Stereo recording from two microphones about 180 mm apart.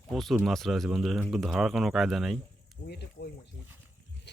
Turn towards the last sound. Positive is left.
turn(degrees=65)  # may be behind; listen again after turning